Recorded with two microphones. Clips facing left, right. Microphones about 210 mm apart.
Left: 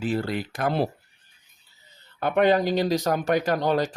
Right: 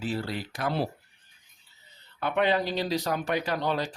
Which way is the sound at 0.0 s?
55° left (ahead or behind).